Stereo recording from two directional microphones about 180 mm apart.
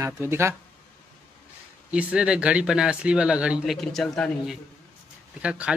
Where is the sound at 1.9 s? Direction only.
5° right (ahead or behind).